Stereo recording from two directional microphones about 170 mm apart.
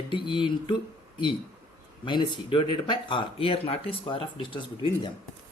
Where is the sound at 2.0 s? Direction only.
30° left (ahead or behind).